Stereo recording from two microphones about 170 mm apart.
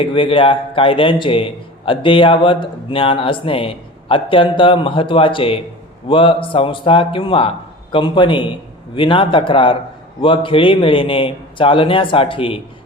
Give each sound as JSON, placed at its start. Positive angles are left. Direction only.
{"t": 0.0, "sound": "a man's voice", "side_deg": 30}